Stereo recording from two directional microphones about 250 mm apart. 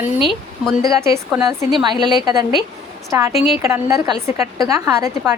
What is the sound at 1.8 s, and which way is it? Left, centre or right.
A woman's voice, centre.